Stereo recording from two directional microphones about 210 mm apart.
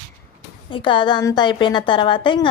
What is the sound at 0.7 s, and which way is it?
A woman's voice, 25° left (ahead or behind).